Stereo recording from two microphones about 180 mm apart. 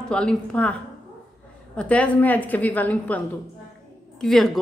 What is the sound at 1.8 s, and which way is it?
A woman's voice, 5° left (ahead or behind).